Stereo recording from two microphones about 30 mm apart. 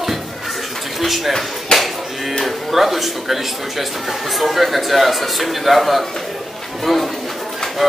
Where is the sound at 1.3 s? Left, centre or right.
Centre.